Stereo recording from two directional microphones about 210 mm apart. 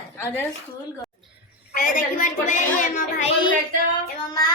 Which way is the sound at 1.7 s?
40° left (ahead or behind).